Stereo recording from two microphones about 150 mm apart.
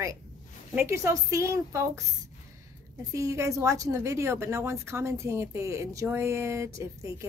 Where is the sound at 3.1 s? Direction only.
20° right (ahead or behind).